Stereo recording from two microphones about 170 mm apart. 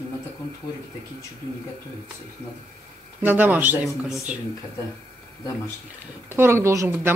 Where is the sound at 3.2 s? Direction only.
10° right (ahead or behind).